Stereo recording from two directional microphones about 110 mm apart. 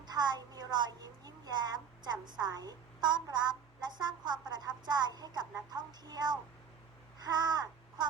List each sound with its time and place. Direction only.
0.0 s a woman's voice: 40° right (ahead or behind)